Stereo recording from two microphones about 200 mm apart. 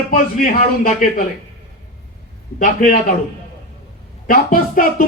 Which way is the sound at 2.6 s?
45° left (ahead or behind).